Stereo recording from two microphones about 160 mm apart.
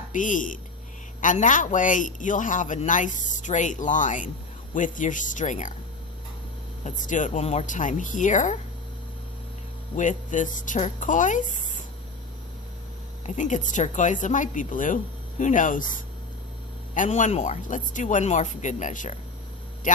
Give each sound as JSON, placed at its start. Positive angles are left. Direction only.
{"t": 0.1, "sound": "a man's voice", "side_deg": 55}
{"t": 6.8, "sound": "a man's voice", "side_deg": 50}
{"t": 9.9, "sound": "a man's voice", "side_deg": 50}
{"t": 13.2, "sound": "a man's voice", "side_deg": 50}
{"t": 16.9, "sound": "a man's voice", "side_deg": 50}